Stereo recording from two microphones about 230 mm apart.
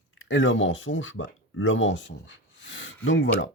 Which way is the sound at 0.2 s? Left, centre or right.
Left.